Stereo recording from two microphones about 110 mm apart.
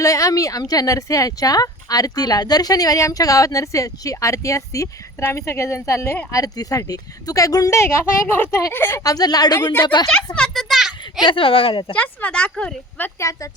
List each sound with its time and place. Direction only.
0.0 s speech: 30° left (ahead or behind)
9.0 s speech: 35° left (ahead or behind)
10.3 s a sound: 5° left (ahead or behind)
11.3 s speech: 55° left (ahead or behind)
11.9 s speech: 15° left (ahead or behind)
13.1 s speech: 30° left (ahead or behind)